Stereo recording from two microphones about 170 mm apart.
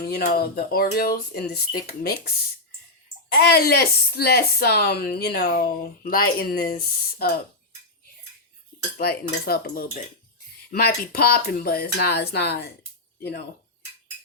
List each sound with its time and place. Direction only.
0.1 s a woman's voice: 60° left (ahead or behind)
3.3 s a woman's voice: 65° left (ahead or behind)
9.0 s a woman's voice: 65° left (ahead or behind)